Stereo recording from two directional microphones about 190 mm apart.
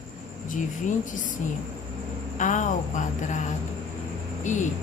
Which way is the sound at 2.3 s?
40° left (ahead or behind).